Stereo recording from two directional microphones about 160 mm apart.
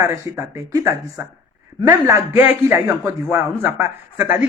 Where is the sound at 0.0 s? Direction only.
15° right (ahead or behind).